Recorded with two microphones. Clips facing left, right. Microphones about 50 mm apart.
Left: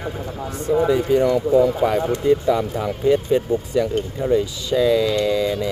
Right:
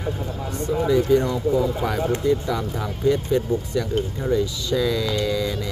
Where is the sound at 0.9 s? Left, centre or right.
Centre.